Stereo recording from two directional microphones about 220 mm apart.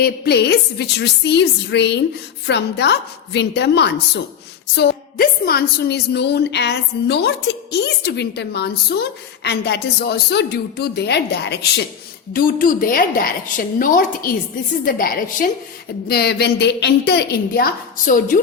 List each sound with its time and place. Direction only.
0.0 s a woman's voice: 50° left (ahead or behind)